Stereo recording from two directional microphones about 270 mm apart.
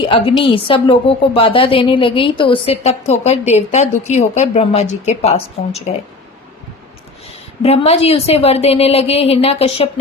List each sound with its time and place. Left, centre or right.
0.0 s a woman's voice: centre
7.3 s a woman's voice: left